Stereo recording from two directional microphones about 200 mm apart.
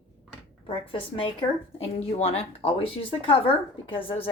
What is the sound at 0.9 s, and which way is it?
A woman's voice, 25° left (ahead or behind).